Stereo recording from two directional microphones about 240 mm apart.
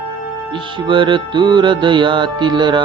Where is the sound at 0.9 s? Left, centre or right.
Right.